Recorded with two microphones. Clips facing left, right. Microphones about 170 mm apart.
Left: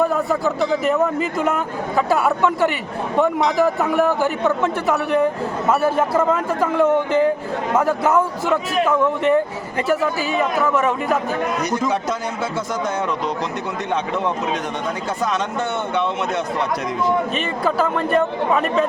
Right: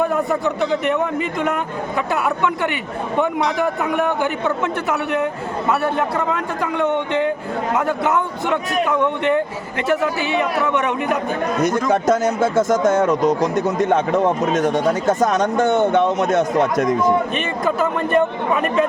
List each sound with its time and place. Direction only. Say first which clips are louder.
0.0 s a man's voice: even; centre (ahead or behind)
10.6 s a man's voice: left 1 dB; centre (ahead or behind)
11.9 s speech: right 6 dB; 45° right (ahead or behind)
17.6 s a man's voice: even; centre (ahead or behind)